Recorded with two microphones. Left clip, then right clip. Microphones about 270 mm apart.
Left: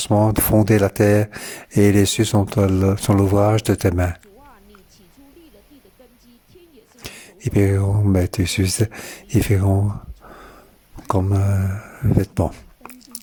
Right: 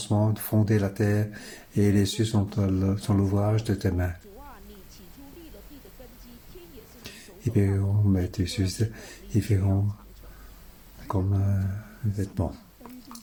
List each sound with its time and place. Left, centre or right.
0.0 s speech: left
7.0 s speech: left
11.1 s speech: left